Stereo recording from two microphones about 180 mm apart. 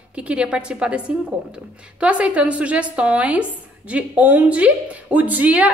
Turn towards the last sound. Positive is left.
turn(degrees=-10)  # may be behind; listen again after turning